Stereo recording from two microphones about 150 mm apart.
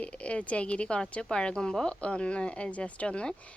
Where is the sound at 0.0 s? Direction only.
10° left (ahead or behind).